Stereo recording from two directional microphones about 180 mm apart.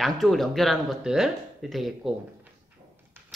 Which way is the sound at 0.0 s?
Centre (ahead or behind).